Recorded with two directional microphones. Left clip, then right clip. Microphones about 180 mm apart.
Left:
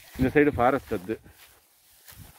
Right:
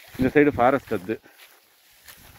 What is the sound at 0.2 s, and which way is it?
Speech, 55° right (ahead or behind).